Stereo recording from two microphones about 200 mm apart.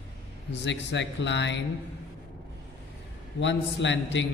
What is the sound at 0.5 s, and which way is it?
A man's voice, 60° left (ahead or behind).